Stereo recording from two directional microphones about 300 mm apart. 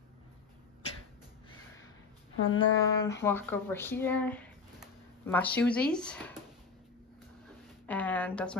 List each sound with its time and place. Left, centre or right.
2.4 s speech: left
2.8 s speech: centre
7.8 s speech: centre